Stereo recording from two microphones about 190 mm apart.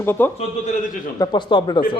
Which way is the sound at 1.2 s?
25° left (ahead or behind).